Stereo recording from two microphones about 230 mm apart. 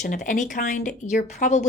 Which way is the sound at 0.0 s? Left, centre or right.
Left.